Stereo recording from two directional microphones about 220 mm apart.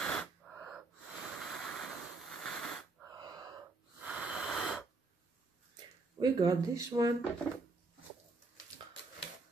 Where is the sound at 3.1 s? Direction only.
15° right (ahead or behind).